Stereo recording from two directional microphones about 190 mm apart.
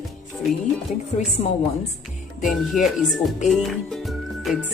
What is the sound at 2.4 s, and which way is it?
Speech, centre (ahead or behind).